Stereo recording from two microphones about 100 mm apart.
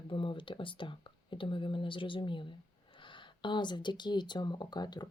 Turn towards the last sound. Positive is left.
turn(degrees=45)  # may be behind; listen again after turning